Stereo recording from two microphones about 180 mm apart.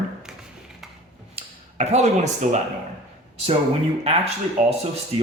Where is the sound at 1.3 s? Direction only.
35° right (ahead or behind).